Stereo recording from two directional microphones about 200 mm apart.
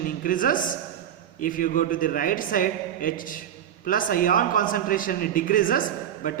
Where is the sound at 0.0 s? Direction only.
45° left (ahead or behind).